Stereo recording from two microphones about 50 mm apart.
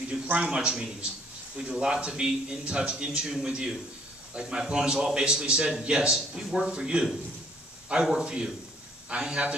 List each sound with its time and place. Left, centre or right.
0.4 s a man's voice: centre